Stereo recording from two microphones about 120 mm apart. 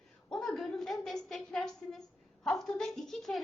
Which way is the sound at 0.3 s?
Centre (ahead or behind).